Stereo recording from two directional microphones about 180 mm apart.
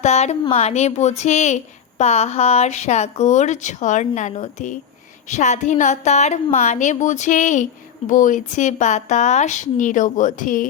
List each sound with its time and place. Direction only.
0.0 s a woman's voice: 35° left (ahead or behind)